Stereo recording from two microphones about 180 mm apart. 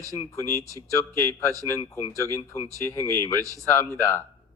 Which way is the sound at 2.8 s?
15° left (ahead or behind).